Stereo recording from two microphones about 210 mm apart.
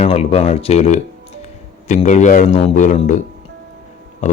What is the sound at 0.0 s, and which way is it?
Speech, 30° left (ahead or behind).